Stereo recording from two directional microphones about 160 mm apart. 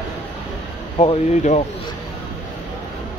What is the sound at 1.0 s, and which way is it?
Speech, 40° left (ahead or behind).